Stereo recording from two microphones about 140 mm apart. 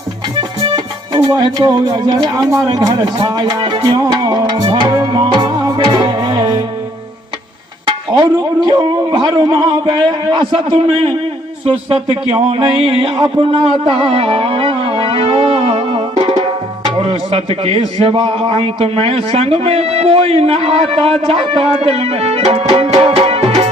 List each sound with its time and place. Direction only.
0.6 s music: 35° right (ahead or behind)
8.1 s a man's voice: 30° right (ahead or behind)
12.3 s a sound: 40° right (ahead or behind)
18.0 s a man's voice: 40° right (ahead or behind)